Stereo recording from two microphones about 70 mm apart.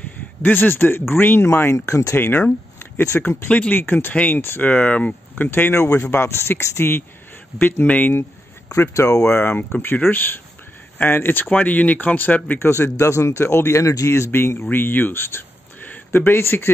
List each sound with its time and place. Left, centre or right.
0.4 s speech: left
3.2 s speech: left
3.7 s speech: left
4.1 s speech: centre
4.4 s speech: left
4.6 s speech: centre
5.5 s speech: left
8.9 s speech: left
12.5 s speech: left